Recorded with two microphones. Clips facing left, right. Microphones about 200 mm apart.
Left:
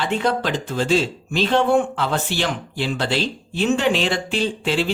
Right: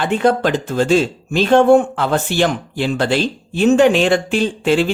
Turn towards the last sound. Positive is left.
turn(degrees=-50)  # may be behind; listen again after turning